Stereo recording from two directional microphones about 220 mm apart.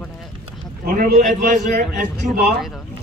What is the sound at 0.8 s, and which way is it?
A man's voice, 35° right (ahead or behind).